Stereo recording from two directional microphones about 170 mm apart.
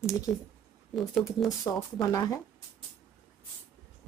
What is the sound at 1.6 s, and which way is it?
Speech, 20° left (ahead or behind).